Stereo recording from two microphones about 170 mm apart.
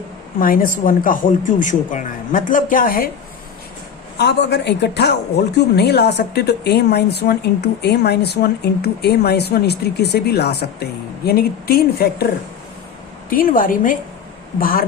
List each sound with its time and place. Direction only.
0.3 s speech: 55° left (ahead or behind)
4.2 s a woman's voice: 85° left
11.3 s a woman's voice: 65° left (ahead or behind)
13.3 s a woman's voice: 55° left (ahead or behind)